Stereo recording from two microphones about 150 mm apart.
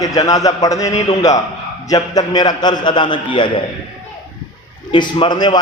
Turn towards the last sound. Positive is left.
turn(degrees=30)  # may be behind; listen again after turning